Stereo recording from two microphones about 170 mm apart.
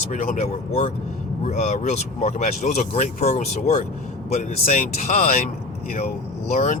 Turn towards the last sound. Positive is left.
turn(degrees=40)  # may be behind; listen again after turning